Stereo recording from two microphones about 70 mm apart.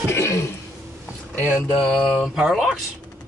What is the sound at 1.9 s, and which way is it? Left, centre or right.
Speech, centre.